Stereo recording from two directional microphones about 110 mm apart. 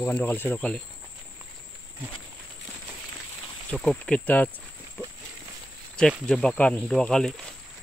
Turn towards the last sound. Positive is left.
turn(degrees=5)  # may be behind; listen again after turning